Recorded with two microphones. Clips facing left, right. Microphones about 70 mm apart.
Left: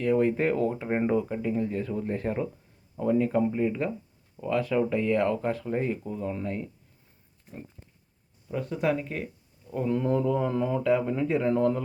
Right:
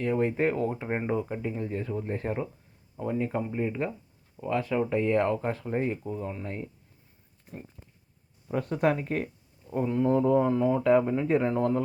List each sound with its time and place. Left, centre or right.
0.0 s speech: right
8.5 s speech: right
9.8 s speech: centre